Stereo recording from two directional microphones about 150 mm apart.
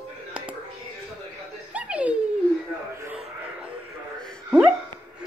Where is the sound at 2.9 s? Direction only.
15° right (ahead or behind).